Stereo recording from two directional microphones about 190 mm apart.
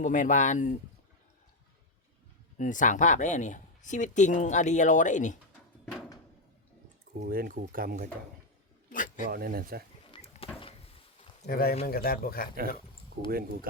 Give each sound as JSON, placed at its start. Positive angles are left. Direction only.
{"t": 0.0, "sound": "speech", "side_deg": 40}
{"t": 2.6, "sound": "speech", "side_deg": 40}
{"t": 7.1, "sound": "speech", "side_deg": -50}
{"t": 8.9, "sound": "a sound", "side_deg": 45}
{"t": 9.3, "sound": "speech", "side_deg": -50}
{"t": 10.1, "sound": "a sound", "side_deg": 30}
{"t": 11.4, "sound": "a man's voice", "side_deg": 55}
{"t": 13.3, "sound": "speech", "side_deg": -50}